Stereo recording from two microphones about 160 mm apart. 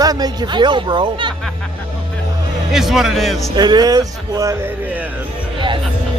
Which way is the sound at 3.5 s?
25° right (ahead or behind).